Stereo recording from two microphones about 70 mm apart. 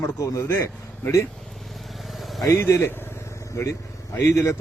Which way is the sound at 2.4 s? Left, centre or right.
Left.